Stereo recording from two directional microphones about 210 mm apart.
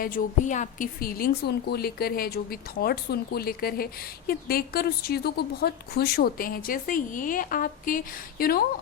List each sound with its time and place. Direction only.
0.0 s a woman's voice: 40° left (ahead or behind)